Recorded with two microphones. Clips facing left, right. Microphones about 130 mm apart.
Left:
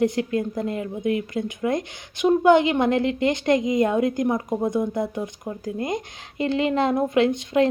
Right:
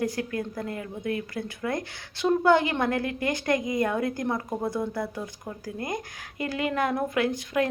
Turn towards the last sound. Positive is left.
turn(degrees=25)  # may be behind; listen again after turning